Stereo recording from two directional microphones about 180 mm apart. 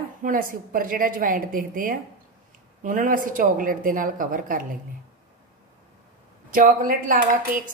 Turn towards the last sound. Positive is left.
turn(degrees=-50)  # may be behind; listen again after turning